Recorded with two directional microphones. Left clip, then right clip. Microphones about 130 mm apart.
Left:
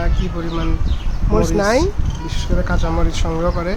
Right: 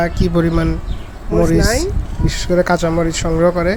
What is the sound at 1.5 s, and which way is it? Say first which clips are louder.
Speech: left 1 dB; 30° left (ahead or behind).